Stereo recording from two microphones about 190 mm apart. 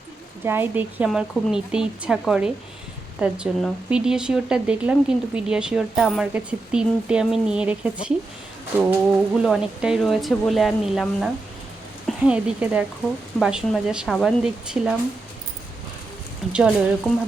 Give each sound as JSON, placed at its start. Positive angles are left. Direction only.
{"t": 0.4, "sound": "a woman's voice", "side_deg": -10}
{"t": 16.5, "sound": "speech", "side_deg": -5}